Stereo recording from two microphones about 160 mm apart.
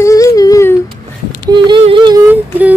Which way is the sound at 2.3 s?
10° right (ahead or behind).